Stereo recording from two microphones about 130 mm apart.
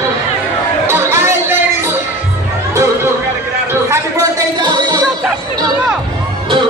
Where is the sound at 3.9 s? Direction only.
30° right (ahead or behind).